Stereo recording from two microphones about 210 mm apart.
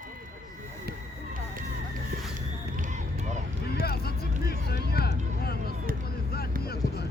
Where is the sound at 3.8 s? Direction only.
45° left (ahead or behind).